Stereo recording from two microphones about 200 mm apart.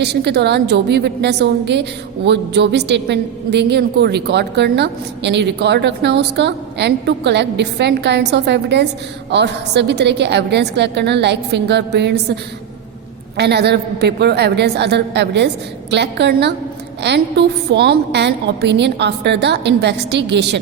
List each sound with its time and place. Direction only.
0.0 s a woman's voice: 55° right (ahead or behind)